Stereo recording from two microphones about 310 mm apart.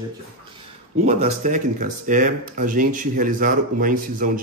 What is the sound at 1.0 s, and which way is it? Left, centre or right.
Speech, right.